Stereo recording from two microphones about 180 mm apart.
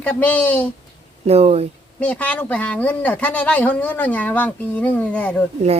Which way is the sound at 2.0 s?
5° left (ahead or behind).